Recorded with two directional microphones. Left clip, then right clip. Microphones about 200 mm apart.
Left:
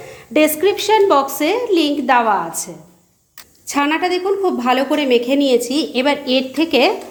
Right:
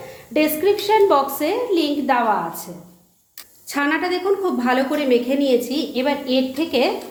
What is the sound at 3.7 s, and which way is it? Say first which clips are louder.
A woman's voice: left 4 dB; 25° left (ahead or behind).